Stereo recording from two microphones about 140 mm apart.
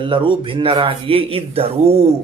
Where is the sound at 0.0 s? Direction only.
35° right (ahead or behind).